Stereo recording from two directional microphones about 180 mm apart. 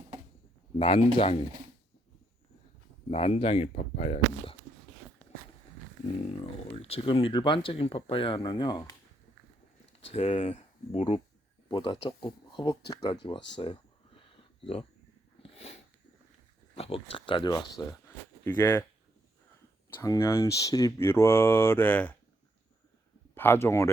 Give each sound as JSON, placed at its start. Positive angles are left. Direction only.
{"t": 0.8, "sound": "speech", "side_deg": 30}
{"t": 3.1, "sound": "speech", "side_deg": 35}
{"t": 6.7, "sound": "speech", "side_deg": 35}
{"t": 10.1, "sound": "speech", "side_deg": 30}
{"t": 15.5, "sound": "a sound", "side_deg": 35}
{"t": 16.7, "sound": "speech", "side_deg": 35}
{"t": 18.4, "sound": "speech", "side_deg": 10}
{"t": 19.9, "sound": "speech", "side_deg": 15}
{"t": 23.3, "sound": "speech", "side_deg": 10}